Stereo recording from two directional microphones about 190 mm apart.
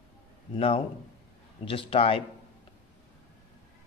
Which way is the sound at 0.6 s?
30° left (ahead or behind).